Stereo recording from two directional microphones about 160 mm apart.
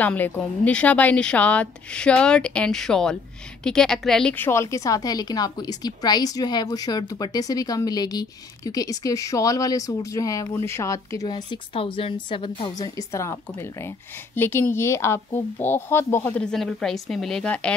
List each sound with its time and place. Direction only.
0.0 s a woman's voice: 10° left (ahead or behind); by 12.7 s 35° left (ahead or behind)
12.7 s a woman's voice: 20° left (ahead or behind); by 17.7 s 5° left (ahead or behind)